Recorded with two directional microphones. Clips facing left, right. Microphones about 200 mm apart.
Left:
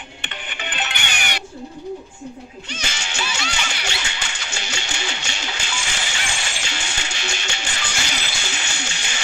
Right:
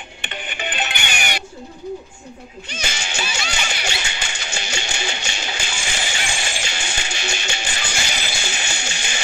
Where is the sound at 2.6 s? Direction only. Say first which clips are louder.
Right 3 dB; 10° right (ahead or behind).